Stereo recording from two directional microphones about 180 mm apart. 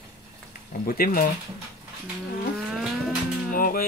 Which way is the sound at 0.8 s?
55° left (ahead or behind).